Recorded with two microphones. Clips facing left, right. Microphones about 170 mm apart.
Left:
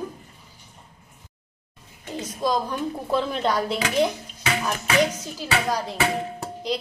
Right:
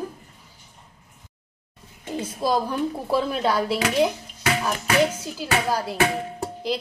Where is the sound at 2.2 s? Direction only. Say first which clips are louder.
Right 1 dB; 5° right (ahead or behind).